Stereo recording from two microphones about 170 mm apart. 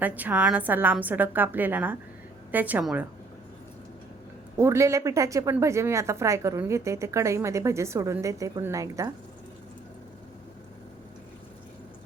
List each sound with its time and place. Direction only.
0.0 s speech: 10° right (ahead or behind)
4.5 s speech: 15° right (ahead or behind)